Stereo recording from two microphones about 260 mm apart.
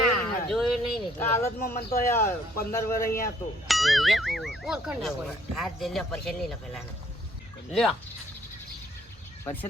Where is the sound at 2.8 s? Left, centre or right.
Left.